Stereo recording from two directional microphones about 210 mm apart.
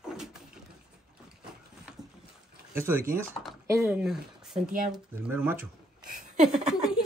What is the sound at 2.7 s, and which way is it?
Speech, 10° right (ahead or behind).